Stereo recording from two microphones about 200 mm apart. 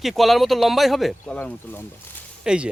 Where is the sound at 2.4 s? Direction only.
5° right (ahead or behind).